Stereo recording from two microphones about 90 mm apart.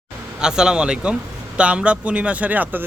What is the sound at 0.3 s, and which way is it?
A man's voice, 10° right (ahead or behind).